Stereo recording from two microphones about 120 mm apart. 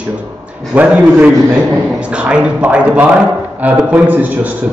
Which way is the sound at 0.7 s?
15° right (ahead or behind).